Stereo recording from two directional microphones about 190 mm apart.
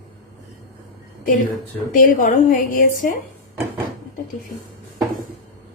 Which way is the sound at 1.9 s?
45° left (ahead or behind).